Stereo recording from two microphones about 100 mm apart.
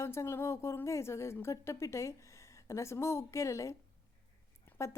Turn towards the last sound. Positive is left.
turn(degrees=25)  # may be behind; listen again after turning